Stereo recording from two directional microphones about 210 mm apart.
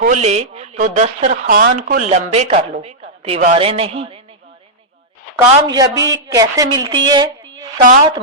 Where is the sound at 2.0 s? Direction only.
30° right (ahead or behind).